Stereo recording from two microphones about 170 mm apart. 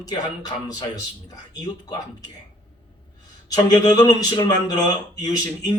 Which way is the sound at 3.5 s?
25° left (ahead or behind).